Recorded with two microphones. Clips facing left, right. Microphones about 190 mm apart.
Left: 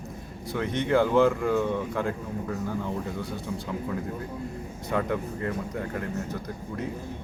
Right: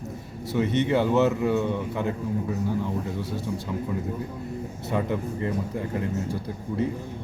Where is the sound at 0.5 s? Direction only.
10° right (ahead or behind).